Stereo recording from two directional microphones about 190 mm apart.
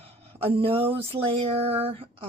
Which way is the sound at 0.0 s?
30° right (ahead or behind).